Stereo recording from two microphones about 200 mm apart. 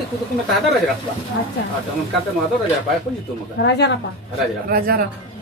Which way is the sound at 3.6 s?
60° left (ahead or behind).